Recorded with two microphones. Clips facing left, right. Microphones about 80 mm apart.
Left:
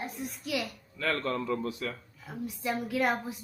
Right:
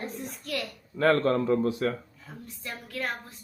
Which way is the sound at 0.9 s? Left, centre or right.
Right.